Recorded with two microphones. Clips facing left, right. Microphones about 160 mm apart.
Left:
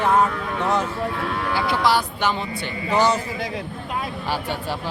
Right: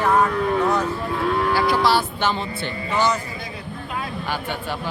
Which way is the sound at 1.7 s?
15° left (ahead or behind).